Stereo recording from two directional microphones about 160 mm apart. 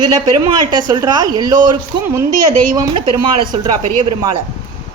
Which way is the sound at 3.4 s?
30° right (ahead or behind).